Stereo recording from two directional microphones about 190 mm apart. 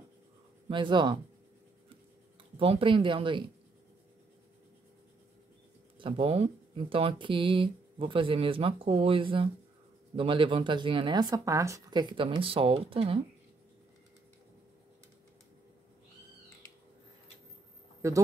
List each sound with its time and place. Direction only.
0.7 s speech: 25° right (ahead or behind)
2.6 s speech: 30° right (ahead or behind)
5.9 s speech: 25° right (ahead or behind)
18.0 s speech: 15° right (ahead or behind)